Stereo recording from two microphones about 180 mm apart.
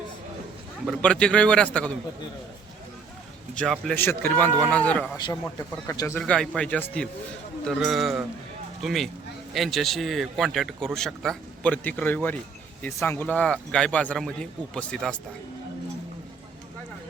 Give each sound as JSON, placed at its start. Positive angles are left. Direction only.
{"t": 0.9, "sound": "speech", "side_deg": 5}
{"t": 3.5, "sound": "speech", "side_deg": 5}
{"t": 5.1, "sound": "a man's voice", "side_deg": 20}